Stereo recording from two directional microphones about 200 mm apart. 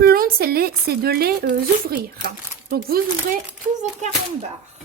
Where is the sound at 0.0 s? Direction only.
45° right (ahead or behind).